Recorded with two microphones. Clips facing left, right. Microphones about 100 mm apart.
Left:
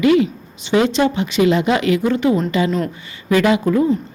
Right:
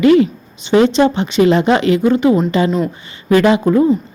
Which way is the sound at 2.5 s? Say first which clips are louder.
Right 3 dB; 35° right (ahead or behind).